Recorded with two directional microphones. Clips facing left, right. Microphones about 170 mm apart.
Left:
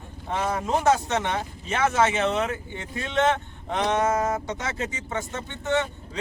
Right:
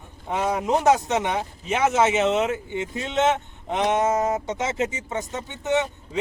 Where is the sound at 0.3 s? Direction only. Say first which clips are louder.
Right 3 dB; 15° right (ahead or behind).